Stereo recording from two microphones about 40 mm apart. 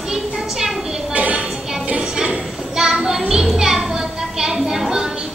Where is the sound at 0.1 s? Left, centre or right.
Centre.